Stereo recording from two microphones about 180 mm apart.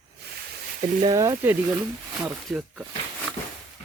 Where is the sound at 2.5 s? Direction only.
Centre (ahead or behind).